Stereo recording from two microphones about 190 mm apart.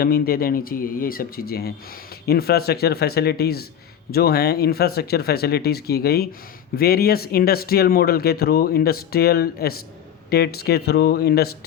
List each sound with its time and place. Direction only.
0.0 s speech: 50° left (ahead or behind)